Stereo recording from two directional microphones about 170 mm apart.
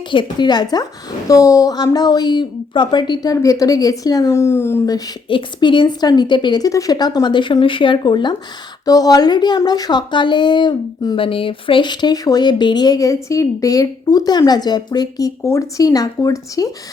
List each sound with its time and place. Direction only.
0.1 s a woman's voice: 25° left (ahead or behind)